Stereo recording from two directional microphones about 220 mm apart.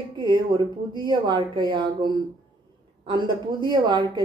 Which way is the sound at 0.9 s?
20° right (ahead or behind).